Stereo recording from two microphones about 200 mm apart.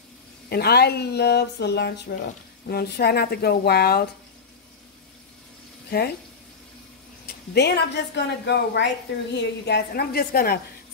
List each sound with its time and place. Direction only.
0.5 s speech: 55° left (ahead or behind)
5.9 s speech: 55° left (ahead or behind)
7.2 s speech: 55° left (ahead or behind)